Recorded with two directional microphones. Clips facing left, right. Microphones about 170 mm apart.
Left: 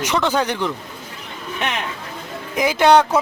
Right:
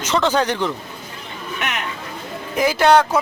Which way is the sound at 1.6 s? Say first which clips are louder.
Left 2 dB; 30° left (ahead or behind).